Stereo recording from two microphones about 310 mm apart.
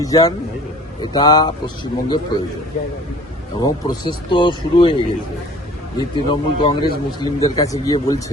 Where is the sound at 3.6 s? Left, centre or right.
Centre.